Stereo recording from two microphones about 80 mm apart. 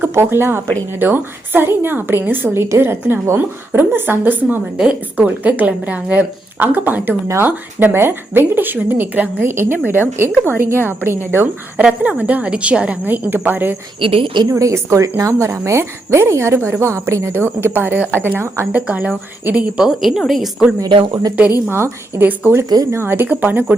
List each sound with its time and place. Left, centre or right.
0.1 s a woman's voice: right
11.8 s a woman's voice: centre
14.0 s a woman's voice: right
14.5 s a woman's voice: right
18.7 s a woman's voice: right; by 20.5 s centre
21.1 s a woman's voice: right
21.3 s a woman's voice: right